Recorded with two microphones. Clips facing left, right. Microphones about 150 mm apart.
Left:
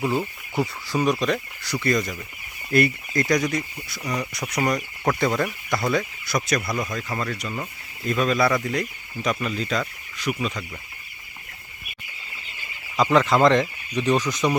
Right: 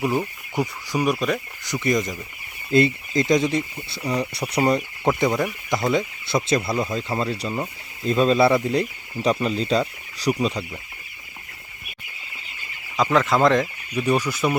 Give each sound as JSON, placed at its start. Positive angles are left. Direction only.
{"t": 0.0, "sound": "speech", "side_deg": -15}
{"t": 1.6, "sound": "speech", "side_deg": -20}
{"t": 5.2, "sound": "speech", "side_deg": -15}
{"t": 13.0, "sound": "speech", "side_deg": 0}